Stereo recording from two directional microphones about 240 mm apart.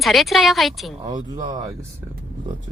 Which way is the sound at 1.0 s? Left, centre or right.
Centre.